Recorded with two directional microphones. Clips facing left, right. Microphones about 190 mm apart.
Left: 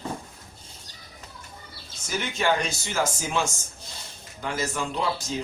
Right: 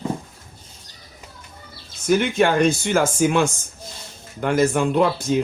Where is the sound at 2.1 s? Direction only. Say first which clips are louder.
Right 8 dB; 55° right (ahead or behind).